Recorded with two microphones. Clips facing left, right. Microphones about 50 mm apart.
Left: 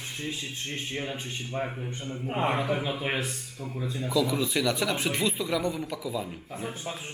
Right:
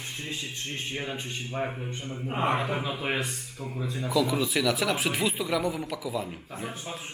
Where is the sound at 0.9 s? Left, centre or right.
Centre.